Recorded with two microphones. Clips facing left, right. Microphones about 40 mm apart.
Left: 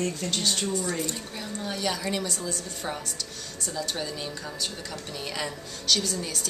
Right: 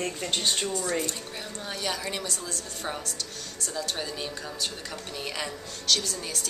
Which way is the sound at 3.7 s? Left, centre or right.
Centre.